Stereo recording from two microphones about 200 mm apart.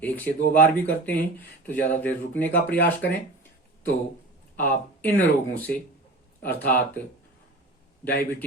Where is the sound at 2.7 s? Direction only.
50° left (ahead or behind).